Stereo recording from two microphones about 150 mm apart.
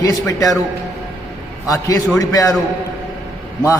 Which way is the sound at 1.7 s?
25° left (ahead or behind).